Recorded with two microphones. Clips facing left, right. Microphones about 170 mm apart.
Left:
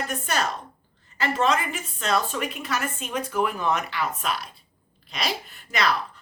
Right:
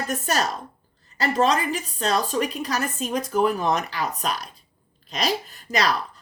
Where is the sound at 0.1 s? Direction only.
40° right (ahead or behind).